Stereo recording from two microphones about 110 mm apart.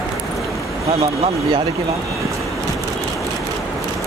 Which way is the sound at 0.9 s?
65° right (ahead or behind).